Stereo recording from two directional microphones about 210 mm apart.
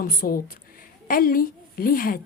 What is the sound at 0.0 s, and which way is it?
A woman's voice, 45° left (ahead or behind).